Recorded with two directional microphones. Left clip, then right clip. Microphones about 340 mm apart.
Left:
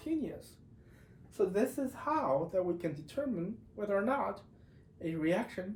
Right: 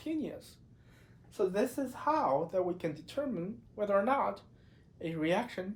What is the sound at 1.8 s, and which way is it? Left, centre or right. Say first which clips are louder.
Speech: right 3 dB; centre.